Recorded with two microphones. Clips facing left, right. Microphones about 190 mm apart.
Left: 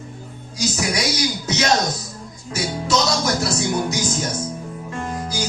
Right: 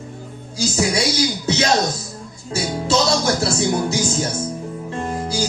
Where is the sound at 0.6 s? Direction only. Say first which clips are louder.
Right 3 dB; 30° right (ahead or behind).